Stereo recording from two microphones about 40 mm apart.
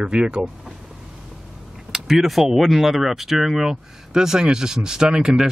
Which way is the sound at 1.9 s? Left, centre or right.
Centre.